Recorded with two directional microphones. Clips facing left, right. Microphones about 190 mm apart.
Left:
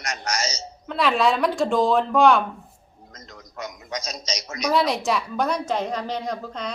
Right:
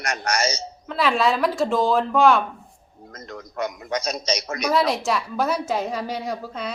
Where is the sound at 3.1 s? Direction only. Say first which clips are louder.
Right 8 dB; 55° right (ahead or behind).